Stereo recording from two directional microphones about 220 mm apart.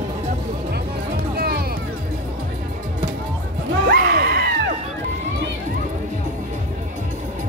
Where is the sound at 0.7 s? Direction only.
45° right (ahead or behind).